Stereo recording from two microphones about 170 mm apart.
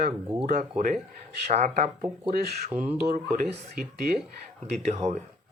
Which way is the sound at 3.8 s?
60° right (ahead or behind).